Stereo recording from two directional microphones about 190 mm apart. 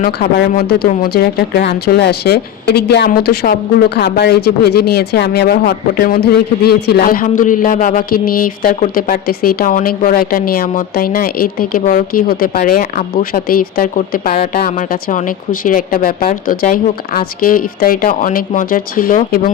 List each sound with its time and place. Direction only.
0.0 s speech: 55° left (ahead or behind)